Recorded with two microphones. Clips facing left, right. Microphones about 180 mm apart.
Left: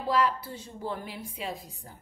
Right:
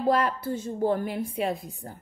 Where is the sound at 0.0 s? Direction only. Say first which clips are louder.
Right 3 dB; 50° right (ahead or behind).